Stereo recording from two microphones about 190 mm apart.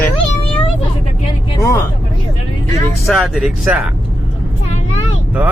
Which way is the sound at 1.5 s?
15° left (ahead or behind).